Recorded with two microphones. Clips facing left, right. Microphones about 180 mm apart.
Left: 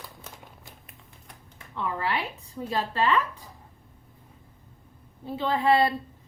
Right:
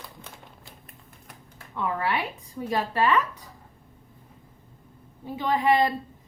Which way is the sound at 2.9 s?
10° right (ahead or behind).